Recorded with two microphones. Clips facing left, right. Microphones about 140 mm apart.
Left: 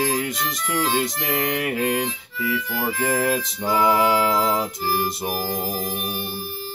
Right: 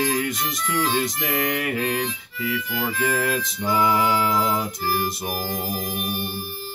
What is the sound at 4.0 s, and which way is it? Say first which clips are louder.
Music: left 2 dB; 90° left.